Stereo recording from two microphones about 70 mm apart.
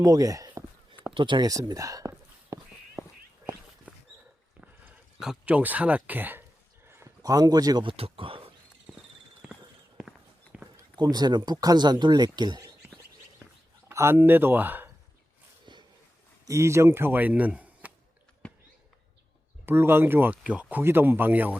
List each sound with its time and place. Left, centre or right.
0.0 s speech: right
2.5 s a sound: right
5.5 s speech: right
6.8 s a sound: right
7.2 s speech: right
10.5 s a sound: centre
10.9 s speech: right
13.9 s speech: right
14.2 s speech: right
16.5 s speech: right
19.6 s speech: right
20.4 s speech: centre